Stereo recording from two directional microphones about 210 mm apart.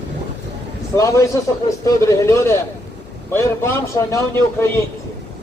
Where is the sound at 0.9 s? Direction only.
15° left (ahead or behind).